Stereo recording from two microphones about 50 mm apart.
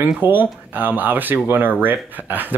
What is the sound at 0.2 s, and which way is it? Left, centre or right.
Speech, right.